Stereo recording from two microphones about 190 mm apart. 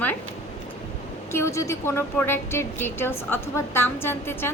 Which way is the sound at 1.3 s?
15° left (ahead or behind).